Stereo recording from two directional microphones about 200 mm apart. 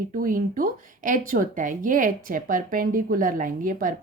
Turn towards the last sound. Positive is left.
turn(degrees=-45)  # may be behind; listen again after turning